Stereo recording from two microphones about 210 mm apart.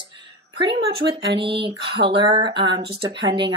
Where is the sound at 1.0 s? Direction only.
55° right (ahead or behind).